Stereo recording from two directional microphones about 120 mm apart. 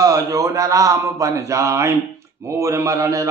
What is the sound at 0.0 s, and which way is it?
A man's voice, 30° right (ahead or behind).